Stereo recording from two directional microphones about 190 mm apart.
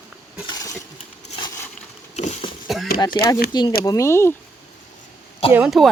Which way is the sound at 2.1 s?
35° left (ahead or behind).